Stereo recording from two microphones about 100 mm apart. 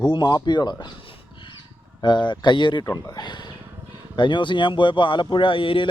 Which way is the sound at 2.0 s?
50° left (ahead or behind).